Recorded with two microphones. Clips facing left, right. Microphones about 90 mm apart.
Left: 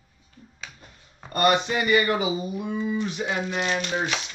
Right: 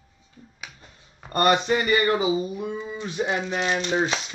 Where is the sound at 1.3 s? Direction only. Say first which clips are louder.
Right 1 dB; 25° right (ahead or behind).